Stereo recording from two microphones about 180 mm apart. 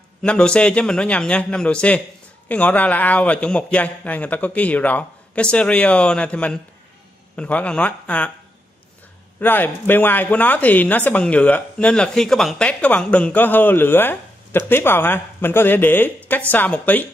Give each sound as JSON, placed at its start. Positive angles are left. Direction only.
{"t": 0.2, "sound": "a man's voice", "side_deg": 5}
{"t": 9.4, "sound": "speech", "side_deg": 10}